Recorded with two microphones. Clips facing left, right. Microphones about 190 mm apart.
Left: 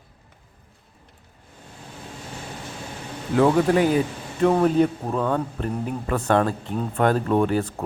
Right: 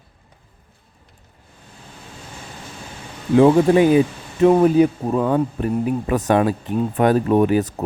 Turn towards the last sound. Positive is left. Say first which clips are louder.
# right 5 dB
turn(degrees=-15)  # may be behind; listen again after turning